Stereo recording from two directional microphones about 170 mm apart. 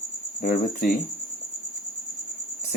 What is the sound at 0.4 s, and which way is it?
Speech, 50° left (ahead or behind).